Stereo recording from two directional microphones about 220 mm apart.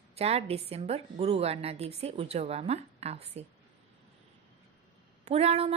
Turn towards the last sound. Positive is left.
turn(degrees=-30)  # may be behind; listen again after turning